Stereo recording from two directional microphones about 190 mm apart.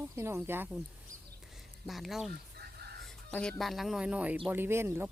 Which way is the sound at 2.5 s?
55° right (ahead or behind).